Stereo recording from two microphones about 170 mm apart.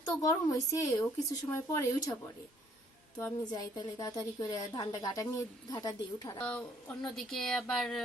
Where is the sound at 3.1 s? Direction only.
5° left (ahead or behind).